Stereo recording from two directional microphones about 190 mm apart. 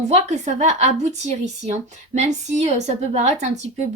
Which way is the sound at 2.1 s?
35° right (ahead or behind).